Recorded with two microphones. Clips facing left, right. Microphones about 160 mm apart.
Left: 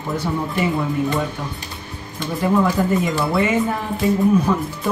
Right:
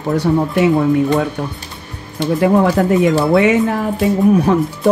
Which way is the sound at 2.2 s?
70° right (ahead or behind).